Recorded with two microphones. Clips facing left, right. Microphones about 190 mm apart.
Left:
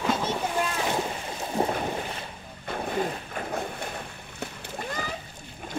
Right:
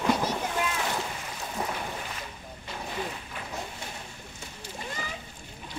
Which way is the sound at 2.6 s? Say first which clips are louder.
Left 7 dB; 50° left (ahead or behind).